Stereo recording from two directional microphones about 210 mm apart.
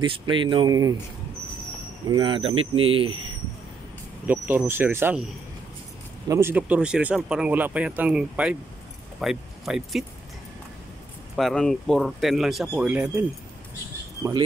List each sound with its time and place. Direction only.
0.0 s speech: 25° right (ahead or behind)
2.0 s speech: 20° right (ahead or behind)
4.3 s speech: 10° right (ahead or behind)
6.2 s speech: 15° right (ahead or behind)
11.3 s speech: centre (ahead or behind)